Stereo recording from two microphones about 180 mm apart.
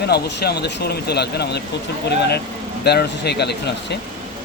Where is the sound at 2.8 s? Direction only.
65° left (ahead or behind).